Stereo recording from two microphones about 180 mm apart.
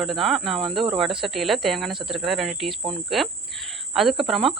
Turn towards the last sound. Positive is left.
turn(degrees=0)  # may be behind; listen again after turning